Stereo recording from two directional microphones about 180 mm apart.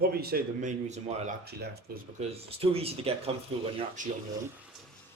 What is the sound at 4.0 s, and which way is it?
Speech, 45° right (ahead or behind).